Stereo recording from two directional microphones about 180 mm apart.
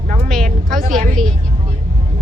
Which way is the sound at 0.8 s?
45° right (ahead or behind).